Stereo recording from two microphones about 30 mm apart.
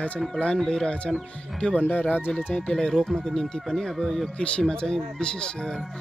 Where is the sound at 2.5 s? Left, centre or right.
Left.